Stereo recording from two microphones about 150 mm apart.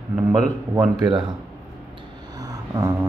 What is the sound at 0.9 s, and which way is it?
Speech, 30° right (ahead or behind).